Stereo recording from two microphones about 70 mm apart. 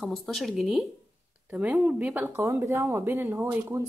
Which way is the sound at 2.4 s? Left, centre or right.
Right.